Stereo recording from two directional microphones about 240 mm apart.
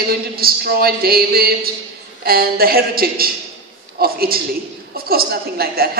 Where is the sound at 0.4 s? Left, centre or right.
Right.